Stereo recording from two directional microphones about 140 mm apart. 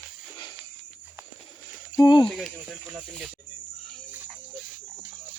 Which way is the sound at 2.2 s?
Centre (ahead or behind).